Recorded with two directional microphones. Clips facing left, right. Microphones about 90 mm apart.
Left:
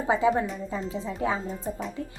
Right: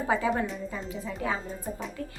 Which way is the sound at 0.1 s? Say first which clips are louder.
Left 4 dB; 20° left (ahead or behind).